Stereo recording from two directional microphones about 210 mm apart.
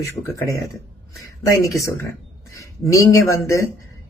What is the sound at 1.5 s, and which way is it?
Speech, 15° left (ahead or behind).